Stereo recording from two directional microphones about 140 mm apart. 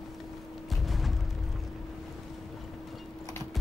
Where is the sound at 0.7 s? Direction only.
Centre (ahead or behind).